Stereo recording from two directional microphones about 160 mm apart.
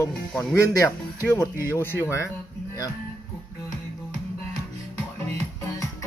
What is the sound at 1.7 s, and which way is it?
Speech, 15° left (ahead or behind).